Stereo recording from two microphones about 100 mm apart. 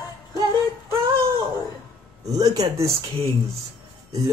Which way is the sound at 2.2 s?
40° right (ahead or behind).